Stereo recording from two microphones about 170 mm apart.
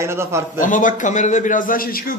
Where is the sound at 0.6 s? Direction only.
50° left (ahead or behind).